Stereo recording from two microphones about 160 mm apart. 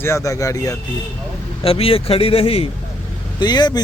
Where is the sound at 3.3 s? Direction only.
25° left (ahead or behind).